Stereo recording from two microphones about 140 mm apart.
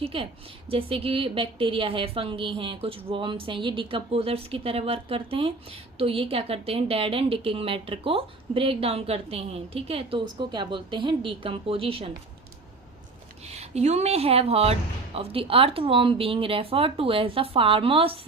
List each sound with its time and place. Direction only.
0.0 s a woman's voice: 40° right (ahead or behind)
13.4 s a woman's voice: 50° right (ahead or behind)